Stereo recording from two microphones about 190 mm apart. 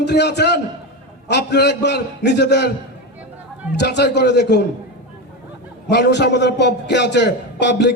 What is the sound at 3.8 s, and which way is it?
Speech, 60° left (ahead or behind).